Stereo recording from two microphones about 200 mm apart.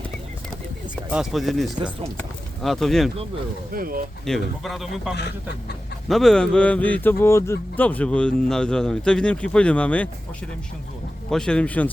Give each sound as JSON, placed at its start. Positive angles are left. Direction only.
{"t": 1.1, "sound": "speech", "side_deg": 0}
{"t": 3.7, "sound": "speech", "side_deg": -45}
{"t": 4.3, "sound": "speech", "side_deg": 0}
{"t": 5.1, "sound": "speech", "side_deg": 60}
{"t": 6.1, "sound": "speech", "side_deg": 0}
{"t": 11.3, "sound": "speech", "side_deg": 5}